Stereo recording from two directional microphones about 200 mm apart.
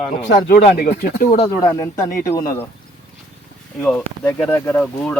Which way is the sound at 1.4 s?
20° left (ahead or behind).